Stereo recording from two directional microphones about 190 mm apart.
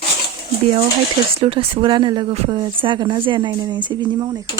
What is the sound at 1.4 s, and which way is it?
Speech, 30° right (ahead or behind).